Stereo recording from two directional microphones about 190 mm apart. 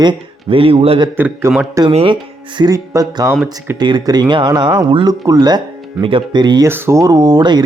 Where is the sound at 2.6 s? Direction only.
20° right (ahead or behind).